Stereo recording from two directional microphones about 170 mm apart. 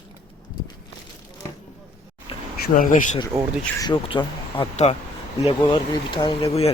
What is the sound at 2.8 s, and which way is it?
Speech, 50° left (ahead or behind).